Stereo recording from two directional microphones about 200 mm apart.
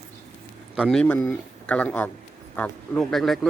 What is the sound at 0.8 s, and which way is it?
Speech, 5° left (ahead or behind).